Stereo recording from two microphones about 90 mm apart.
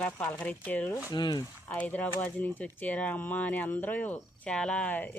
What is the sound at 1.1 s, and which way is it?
Speech, 50° left (ahead or behind).